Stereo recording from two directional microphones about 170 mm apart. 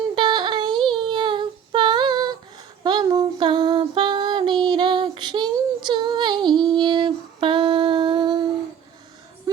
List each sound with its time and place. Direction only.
0.2 s a sound: 25° right (ahead or behind)
2.8 s child singing: 25° right (ahead or behind)
6.5 s music: 5° left (ahead or behind)
6.7 s humming: 25° right (ahead or behind)